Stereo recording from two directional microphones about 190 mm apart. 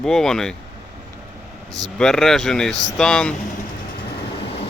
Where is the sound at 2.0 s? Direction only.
Centre (ahead or behind).